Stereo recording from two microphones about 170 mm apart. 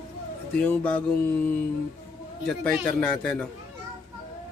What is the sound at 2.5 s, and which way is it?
Speech, 5° left (ahead or behind).